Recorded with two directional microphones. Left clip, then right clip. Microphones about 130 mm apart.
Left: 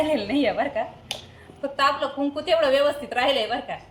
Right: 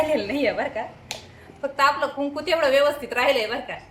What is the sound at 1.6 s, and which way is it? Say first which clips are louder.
A woman's voice: right 2 dB; 25° right (ahead or behind).